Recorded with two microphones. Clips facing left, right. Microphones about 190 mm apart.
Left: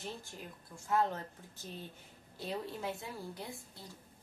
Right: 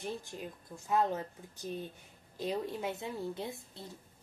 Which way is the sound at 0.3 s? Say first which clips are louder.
Right 5 dB; 25° right (ahead or behind).